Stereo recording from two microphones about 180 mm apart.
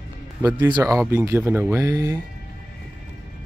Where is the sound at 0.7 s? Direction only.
20° right (ahead or behind).